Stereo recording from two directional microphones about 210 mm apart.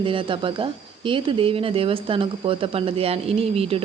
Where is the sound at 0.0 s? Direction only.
25° right (ahead or behind).